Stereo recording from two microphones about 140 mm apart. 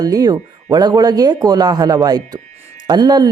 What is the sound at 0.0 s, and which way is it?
Speech, 25° right (ahead or behind).